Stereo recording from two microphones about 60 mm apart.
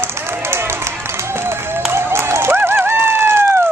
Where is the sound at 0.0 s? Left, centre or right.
Right.